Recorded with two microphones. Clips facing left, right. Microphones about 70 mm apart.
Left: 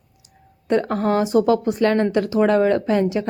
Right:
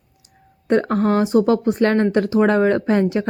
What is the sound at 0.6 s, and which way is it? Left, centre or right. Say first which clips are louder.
Speech: right 2 dB; right.